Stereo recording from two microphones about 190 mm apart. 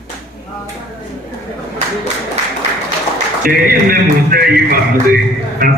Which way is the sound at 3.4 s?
50° right (ahead or behind).